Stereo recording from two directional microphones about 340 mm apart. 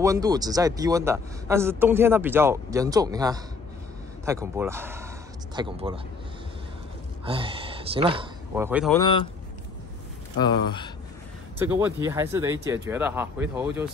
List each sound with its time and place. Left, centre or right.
0.0 s a man's voice: centre
7.2 s speech: centre
9.0 s speech: centre
10.4 s speech: centre
11.5 s a man's voice: centre